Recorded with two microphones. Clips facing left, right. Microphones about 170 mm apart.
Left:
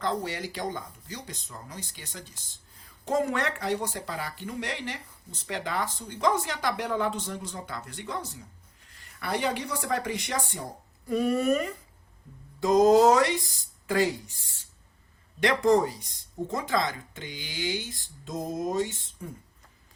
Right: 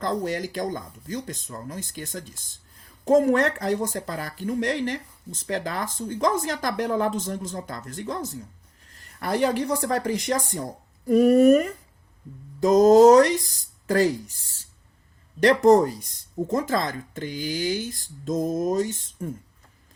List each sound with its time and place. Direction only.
0.0 s speech: 45° right (ahead or behind)